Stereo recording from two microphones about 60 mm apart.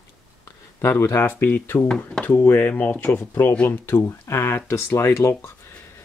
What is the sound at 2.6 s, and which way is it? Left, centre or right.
Speech, left.